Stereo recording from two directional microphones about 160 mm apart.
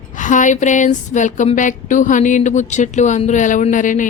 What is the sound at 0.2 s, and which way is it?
A woman's voice, 50° left (ahead or behind).